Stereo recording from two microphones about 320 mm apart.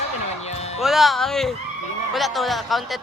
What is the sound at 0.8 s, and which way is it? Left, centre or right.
Speech, centre.